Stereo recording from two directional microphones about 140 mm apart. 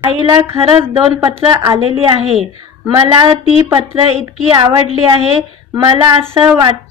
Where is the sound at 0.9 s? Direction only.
40° right (ahead or behind).